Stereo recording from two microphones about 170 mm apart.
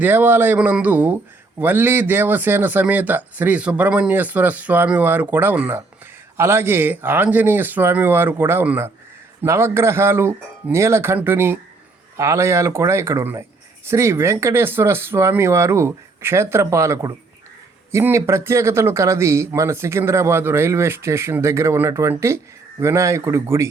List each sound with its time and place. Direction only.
0.0 s speech: 10° right (ahead or behind)